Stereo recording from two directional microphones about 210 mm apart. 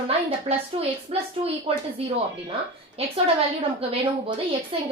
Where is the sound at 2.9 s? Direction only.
25° right (ahead or behind).